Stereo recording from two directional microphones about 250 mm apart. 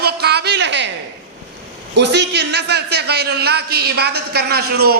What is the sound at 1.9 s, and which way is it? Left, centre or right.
A man's voice, right.